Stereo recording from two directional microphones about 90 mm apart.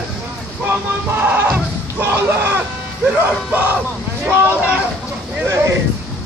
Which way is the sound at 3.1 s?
15° right (ahead or behind).